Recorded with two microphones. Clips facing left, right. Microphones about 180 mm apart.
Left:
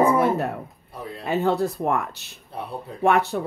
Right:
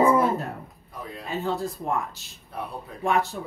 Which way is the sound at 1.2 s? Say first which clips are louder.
Left 7 dB; 70° left (ahead or behind).